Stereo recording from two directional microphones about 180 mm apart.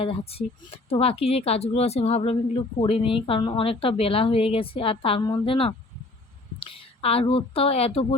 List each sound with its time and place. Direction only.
0.0 s a woman's voice: 30° left (ahead or behind)